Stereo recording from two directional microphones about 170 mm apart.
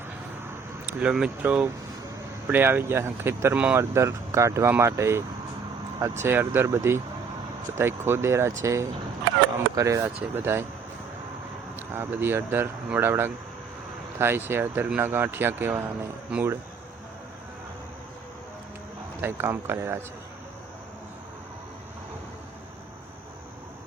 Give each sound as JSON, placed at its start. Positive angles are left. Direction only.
{"t": 0.9, "sound": "speech", "side_deg": -5}
{"t": 11.8, "sound": "speech", "side_deg": -10}
{"t": 19.2, "sound": "speech", "side_deg": -15}